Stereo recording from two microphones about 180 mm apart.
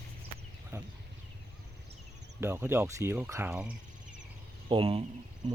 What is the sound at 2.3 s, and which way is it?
Speech, 15° right (ahead or behind).